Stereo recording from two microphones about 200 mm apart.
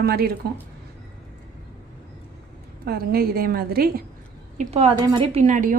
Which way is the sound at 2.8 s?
50° right (ahead or behind).